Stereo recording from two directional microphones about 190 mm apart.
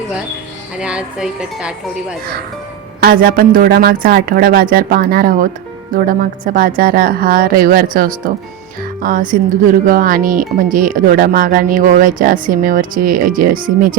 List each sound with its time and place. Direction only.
0.8 s a woman's voice: 5° right (ahead or behind)
3.0 s speech: 50° right (ahead or behind)